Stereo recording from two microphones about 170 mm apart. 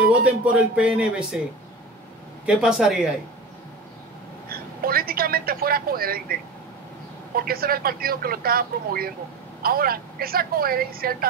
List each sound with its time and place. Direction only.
0.1 s speech: 10° right (ahead or behind)
2.4 s speech: 5° right (ahead or behind)
4.5 s a woman's voice: 60° right (ahead or behind)
7.3 s speech: 60° right (ahead or behind)